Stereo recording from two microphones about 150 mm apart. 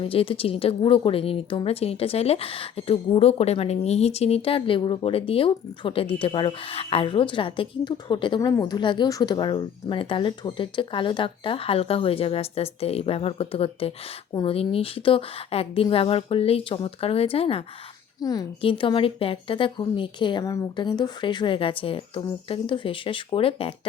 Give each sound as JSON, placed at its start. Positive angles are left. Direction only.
{"t": 0.0, "sound": "speech", "side_deg": 35}
{"t": 18.2, "sound": "a woman's voice", "side_deg": 25}